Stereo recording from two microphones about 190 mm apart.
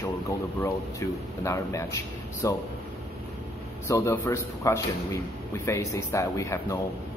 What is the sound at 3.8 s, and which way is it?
Speech, 15° left (ahead or behind).